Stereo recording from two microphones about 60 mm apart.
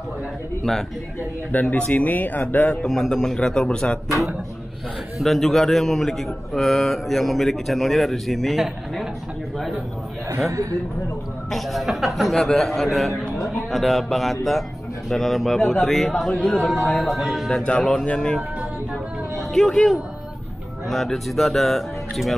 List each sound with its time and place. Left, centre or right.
1.5 s speech: left
2.7 s a man's voice: centre
5.2 s a man's voice: centre
10.5 s speech: right
11.5 s a man's voice: centre
17.5 s a man's voice: centre
19.5 s a man's voice: centre